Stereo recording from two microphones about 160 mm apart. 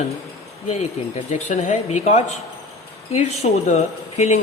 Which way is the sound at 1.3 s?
50° left (ahead or behind).